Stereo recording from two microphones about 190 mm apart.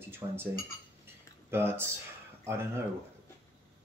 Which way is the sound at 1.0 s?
10° right (ahead or behind).